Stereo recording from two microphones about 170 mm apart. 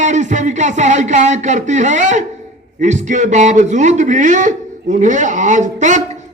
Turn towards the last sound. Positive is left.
turn(degrees=-45)  # may be behind; listen again after turning